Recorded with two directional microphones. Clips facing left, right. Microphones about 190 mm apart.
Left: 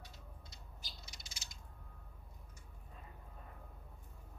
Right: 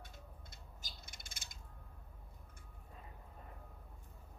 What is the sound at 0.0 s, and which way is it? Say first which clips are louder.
Cat: right 1 dB; 50° right (ahead or behind).